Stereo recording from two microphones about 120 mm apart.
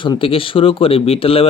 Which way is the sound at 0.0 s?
45° left (ahead or behind).